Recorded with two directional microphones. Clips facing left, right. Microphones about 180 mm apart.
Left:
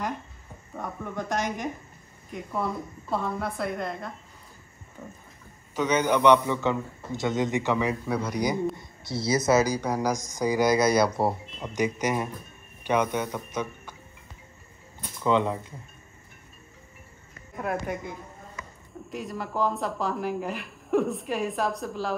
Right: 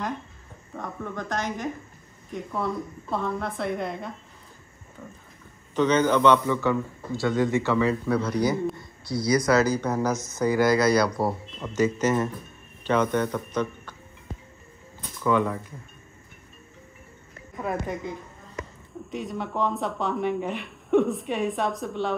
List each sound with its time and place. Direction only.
0.7 s a man's voice: 10° left (ahead or behind)
5.8 s a man's voice: 10° left (ahead or behind)
8.7 s a man's voice: 25° left (ahead or behind)
15.2 s speech: 20° left (ahead or behind)
19.0 s speech: centre (ahead or behind)